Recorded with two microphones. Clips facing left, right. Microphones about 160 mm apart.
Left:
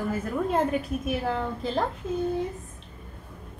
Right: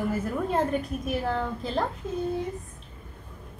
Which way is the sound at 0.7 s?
5° left (ahead or behind).